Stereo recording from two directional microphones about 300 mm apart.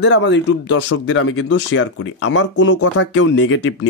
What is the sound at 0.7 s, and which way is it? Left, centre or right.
Speech, left.